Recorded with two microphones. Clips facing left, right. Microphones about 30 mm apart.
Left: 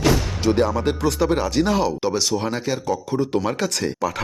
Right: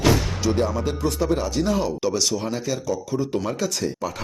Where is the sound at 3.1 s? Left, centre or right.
Left.